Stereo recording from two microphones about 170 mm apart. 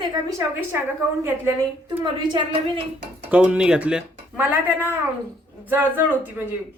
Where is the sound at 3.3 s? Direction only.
5° right (ahead or behind).